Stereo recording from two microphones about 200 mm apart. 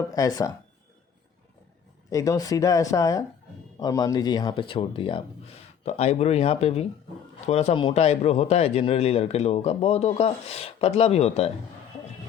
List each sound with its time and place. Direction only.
0.1 s speech: 15° left (ahead or behind)
2.0 s a man's voice: 15° left (ahead or behind)